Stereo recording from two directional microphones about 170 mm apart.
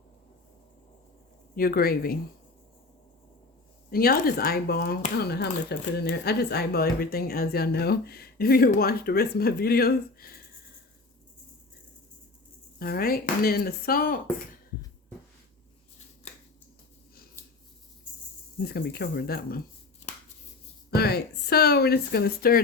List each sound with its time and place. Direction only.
1.5 s speech: 60° left (ahead or behind)
3.8 s speech: 60° left (ahead or behind)
12.8 s speech: 60° left (ahead or behind)
18.6 s speech: 70° left (ahead or behind)
20.9 s speech: 70° left (ahead or behind)